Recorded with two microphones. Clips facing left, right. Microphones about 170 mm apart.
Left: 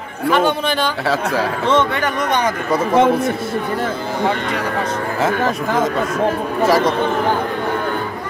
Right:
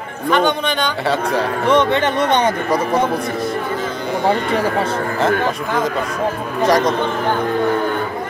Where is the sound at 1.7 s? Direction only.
20° right (ahead or behind).